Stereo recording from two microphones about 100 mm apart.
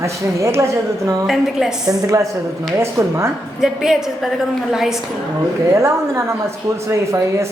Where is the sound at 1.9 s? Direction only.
35° right (ahead or behind).